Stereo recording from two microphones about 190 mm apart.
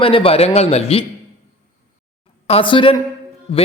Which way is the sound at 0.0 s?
30° left (ahead or behind).